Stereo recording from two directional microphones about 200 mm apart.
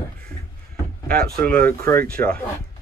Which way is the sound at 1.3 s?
5° left (ahead or behind).